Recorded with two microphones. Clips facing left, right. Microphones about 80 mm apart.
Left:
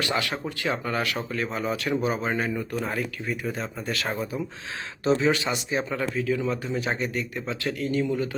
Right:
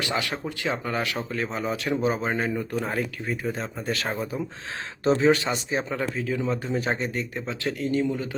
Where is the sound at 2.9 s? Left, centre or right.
Right.